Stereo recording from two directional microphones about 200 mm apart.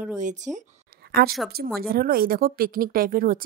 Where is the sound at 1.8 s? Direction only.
45° right (ahead or behind).